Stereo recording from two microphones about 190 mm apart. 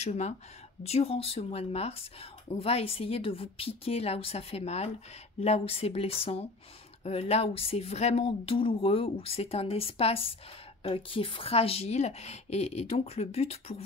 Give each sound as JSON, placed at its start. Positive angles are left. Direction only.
{"t": 0.0, "sound": "speech", "side_deg": 35}